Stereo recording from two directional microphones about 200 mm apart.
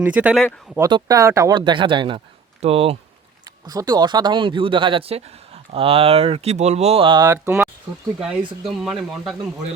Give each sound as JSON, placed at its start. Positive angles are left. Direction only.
{"t": 0.0, "sound": "speech", "side_deg": -5}
{"t": 0.8, "sound": "speech", "side_deg": -20}
{"t": 3.7, "sound": "speech", "side_deg": -20}
{"t": 8.2, "sound": "speech", "side_deg": -5}